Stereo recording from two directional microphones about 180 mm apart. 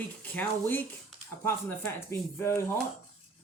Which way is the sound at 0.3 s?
10° left (ahead or behind).